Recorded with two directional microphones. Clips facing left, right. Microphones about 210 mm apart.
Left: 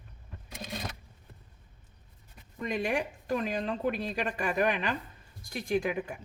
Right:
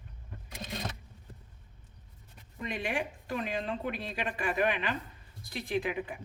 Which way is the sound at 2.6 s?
40° left (ahead or behind).